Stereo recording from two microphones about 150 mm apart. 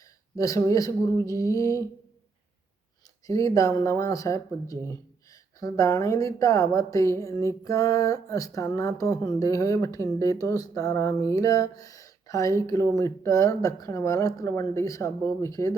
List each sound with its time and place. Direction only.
0.3 s speech: 20° left (ahead or behind)
3.2 s speech: 20° left (ahead or behind)